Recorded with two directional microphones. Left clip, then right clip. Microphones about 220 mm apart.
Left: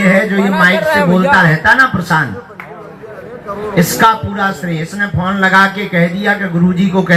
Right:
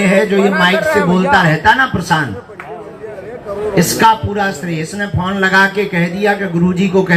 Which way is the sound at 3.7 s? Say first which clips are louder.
Even; 15° left (ahead or behind).